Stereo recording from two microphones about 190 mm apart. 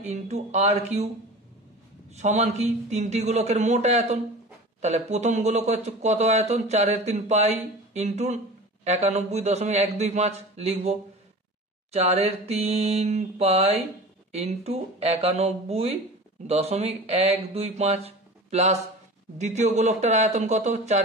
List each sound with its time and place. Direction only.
0.0 s speech: 35° right (ahead or behind)
2.1 s speech: 35° right (ahead or behind)